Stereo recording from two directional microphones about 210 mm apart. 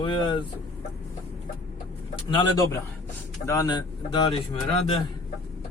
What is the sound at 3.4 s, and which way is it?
Speech, 15° left (ahead or behind).